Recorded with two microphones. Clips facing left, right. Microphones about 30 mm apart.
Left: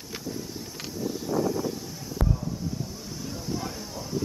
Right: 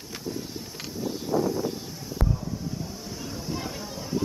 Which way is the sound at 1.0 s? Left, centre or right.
Right.